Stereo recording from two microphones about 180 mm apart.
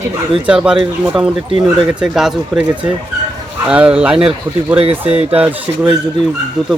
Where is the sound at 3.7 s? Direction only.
5° right (ahead or behind).